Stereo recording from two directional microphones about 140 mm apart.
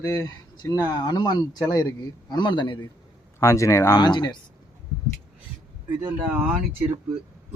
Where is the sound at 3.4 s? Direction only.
20° left (ahead or behind).